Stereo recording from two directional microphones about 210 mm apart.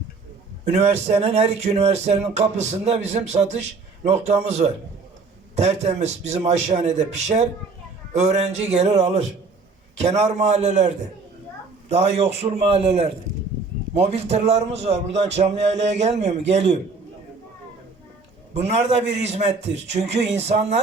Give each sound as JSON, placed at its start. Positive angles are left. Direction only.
{"t": 0.7, "sound": "speech", "side_deg": -30}
{"t": 5.5, "sound": "a man's voice", "side_deg": -30}
{"t": 18.5, "sound": "speech", "side_deg": -30}